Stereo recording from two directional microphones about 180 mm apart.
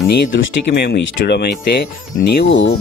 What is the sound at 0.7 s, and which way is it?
Speech, 60° left (ahead or behind).